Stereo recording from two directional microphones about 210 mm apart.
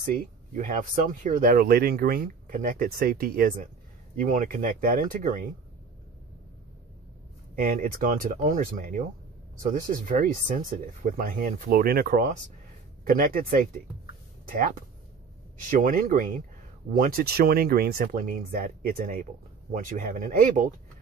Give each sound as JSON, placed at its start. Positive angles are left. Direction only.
{"t": 0.1, "sound": "speech", "side_deg": -40}
{"t": 7.5, "sound": "speech", "side_deg": -40}
{"t": 14.4, "sound": "a sound", "side_deg": -40}
{"t": 15.7, "sound": "speech", "side_deg": -40}